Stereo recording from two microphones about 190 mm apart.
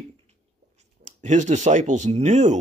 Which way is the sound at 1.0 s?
40° right (ahead or behind).